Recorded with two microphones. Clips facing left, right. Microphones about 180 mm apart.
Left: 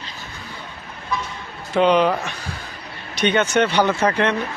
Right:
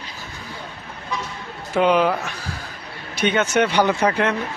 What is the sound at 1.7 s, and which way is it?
A man's voice, 5° right (ahead or behind).